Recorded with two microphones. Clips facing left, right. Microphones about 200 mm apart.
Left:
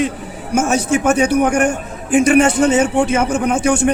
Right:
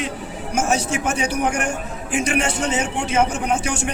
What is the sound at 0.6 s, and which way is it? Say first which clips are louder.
A man's voice: left 6 dB; 50° left (ahead or behind).